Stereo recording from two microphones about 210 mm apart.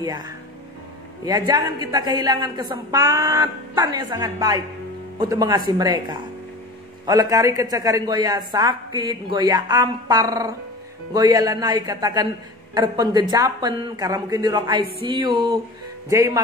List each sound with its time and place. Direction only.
0.0 s speech: 20° right (ahead or behind)